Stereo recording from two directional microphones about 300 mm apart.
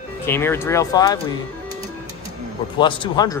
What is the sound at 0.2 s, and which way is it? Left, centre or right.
Speech, centre.